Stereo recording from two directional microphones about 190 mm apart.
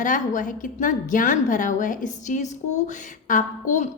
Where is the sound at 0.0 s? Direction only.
45° left (ahead or behind).